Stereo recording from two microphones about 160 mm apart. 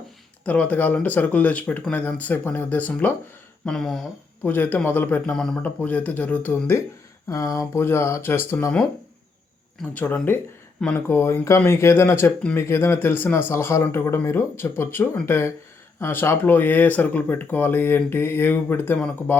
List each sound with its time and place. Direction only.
0.4 s speech: 10° left (ahead or behind)
9.9 s speech: 10° left (ahead or behind)